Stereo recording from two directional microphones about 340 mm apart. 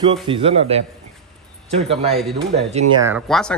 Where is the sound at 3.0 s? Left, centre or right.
Centre.